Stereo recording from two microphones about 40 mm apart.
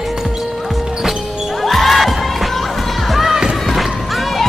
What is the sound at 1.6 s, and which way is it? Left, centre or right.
Crowd, centre.